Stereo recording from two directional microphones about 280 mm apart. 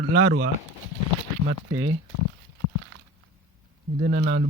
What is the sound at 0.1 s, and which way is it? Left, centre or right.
Speech, right.